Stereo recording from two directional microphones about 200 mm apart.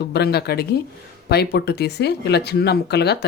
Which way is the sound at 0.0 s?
55° left (ahead or behind).